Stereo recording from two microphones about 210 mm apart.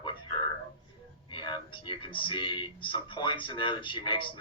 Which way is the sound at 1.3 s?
20° left (ahead or behind).